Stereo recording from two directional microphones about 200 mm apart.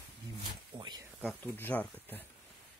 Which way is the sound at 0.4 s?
20° right (ahead or behind).